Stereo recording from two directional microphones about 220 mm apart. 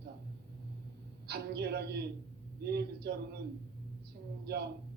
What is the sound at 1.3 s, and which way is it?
A man's voice, 45° right (ahead or behind).